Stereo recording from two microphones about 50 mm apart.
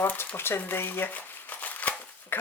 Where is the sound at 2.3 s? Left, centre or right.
Left.